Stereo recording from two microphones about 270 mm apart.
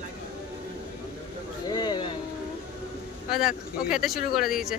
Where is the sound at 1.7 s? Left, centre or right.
Centre.